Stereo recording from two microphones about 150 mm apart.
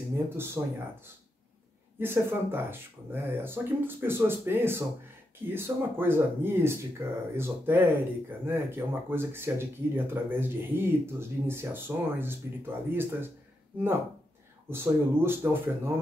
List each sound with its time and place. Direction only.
0.4 s speech: 15° right (ahead or behind)
14.7 s speech: 15° right (ahead or behind)